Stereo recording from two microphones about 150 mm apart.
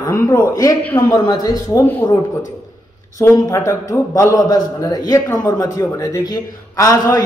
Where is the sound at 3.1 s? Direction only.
20° left (ahead or behind).